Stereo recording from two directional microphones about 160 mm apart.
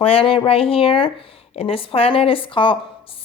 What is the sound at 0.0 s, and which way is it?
A woman's voice, 35° left (ahead or behind).